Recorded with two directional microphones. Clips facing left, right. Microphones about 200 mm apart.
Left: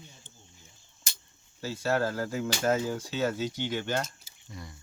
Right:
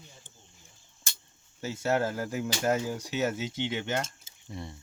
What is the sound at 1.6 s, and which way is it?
Speech, 20° right (ahead or behind).